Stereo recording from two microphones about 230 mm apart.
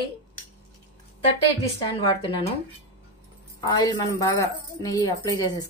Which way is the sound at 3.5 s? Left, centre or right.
Centre.